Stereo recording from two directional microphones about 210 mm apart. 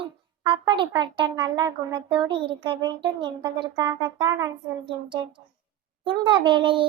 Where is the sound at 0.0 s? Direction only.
20° right (ahead or behind).